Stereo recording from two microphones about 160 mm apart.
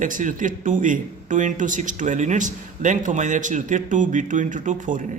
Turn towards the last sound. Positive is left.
turn(degrees=-50)  # may be behind; listen again after turning